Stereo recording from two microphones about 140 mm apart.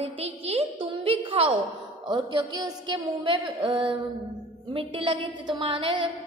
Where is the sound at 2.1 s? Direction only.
35° right (ahead or behind).